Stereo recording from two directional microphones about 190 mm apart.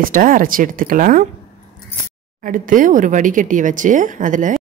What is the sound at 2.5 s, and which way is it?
Speech, 45° right (ahead or behind).